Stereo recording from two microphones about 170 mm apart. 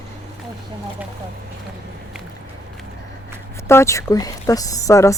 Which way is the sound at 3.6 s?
15° left (ahead or behind).